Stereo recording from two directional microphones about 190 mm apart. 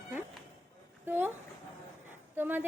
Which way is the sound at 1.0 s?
10° right (ahead or behind).